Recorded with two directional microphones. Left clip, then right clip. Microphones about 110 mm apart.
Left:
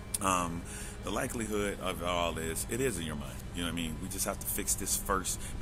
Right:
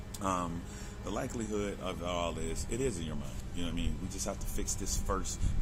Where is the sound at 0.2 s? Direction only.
Centre (ahead or behind).